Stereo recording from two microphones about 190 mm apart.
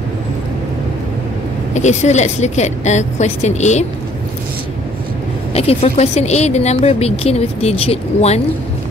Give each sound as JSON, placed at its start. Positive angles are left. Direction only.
{"t": 1.7, "sound": "speech", "side_deg": 40}
{"t": 5.5, "sound": "speech", "side_deg": 30}